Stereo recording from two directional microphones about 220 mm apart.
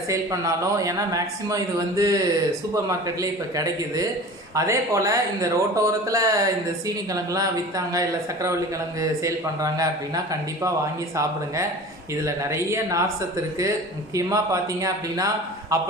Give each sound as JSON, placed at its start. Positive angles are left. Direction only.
{"t": 0.1, "sound": "speech", "side_deg": -15}
{"t": 12.2, "sound": "speech", "side_deg": -15}